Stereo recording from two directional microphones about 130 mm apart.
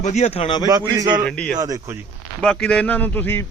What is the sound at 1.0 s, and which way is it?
Speech, 35° right (ahead or behind).